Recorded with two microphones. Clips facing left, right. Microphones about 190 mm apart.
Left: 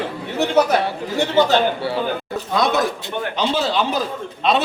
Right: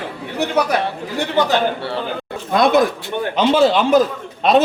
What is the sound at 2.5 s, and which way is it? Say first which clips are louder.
A man's voice: right 5 dB; 55° right (ahead or behind).